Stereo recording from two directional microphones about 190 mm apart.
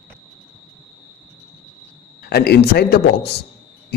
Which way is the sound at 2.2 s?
55° left (ahead or behind).